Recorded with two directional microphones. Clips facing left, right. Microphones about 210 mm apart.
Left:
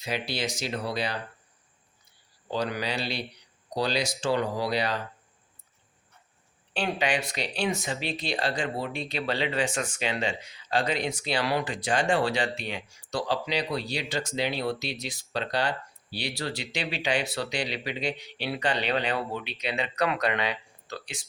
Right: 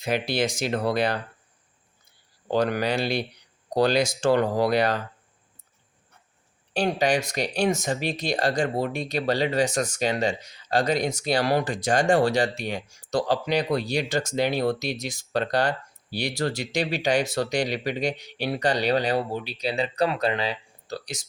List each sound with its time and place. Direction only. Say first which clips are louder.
0.0 s speech: right 6 dB; 50° right (ahead or behind)
2.5 s speech: right 6 dB; 50° right (ahead or behind)
6.7 s speech: right 5 dB; 40° right (ahead or behind)